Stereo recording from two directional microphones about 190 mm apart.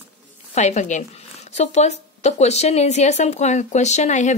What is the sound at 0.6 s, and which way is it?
Speech, 35° left (ahead or behind).